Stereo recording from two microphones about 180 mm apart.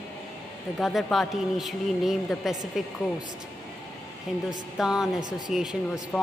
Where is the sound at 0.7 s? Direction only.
Centre (ahead or behind).